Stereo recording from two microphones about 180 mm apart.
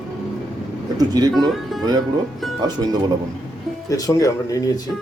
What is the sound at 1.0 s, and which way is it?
Speech, 20° right (ahead or behind).